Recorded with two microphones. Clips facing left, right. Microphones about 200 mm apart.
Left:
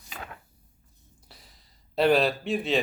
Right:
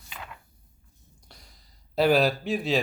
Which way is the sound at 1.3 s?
Centre (ahead or behind).